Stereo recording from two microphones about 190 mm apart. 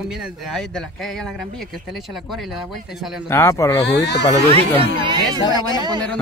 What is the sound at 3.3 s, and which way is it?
Speech, 15° left (ahead or behind).